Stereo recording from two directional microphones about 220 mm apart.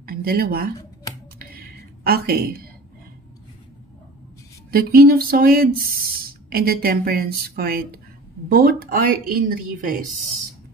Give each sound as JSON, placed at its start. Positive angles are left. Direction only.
{"t": 0.0, "sound": "speech", "side_deg": -40}
{"t": 1.4, "sound": "a sound", "side_deg": -45}
{"t": 4.6, "sound": "a woman's voice", "side_deg": -45}